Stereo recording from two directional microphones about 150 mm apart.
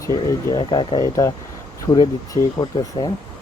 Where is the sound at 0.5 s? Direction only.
35° left (ahead or behind).